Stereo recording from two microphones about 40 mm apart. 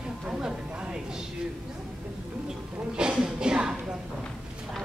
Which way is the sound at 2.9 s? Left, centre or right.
Centre.